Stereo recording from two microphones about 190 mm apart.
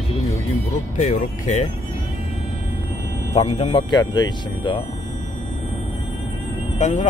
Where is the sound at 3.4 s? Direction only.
30° left (ahead or behind).